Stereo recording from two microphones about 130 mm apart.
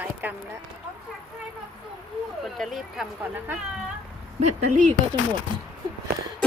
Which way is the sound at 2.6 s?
Centre (ahead or behind).